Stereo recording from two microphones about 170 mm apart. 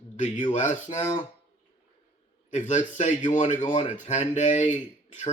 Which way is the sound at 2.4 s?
45° left (ahead or behind).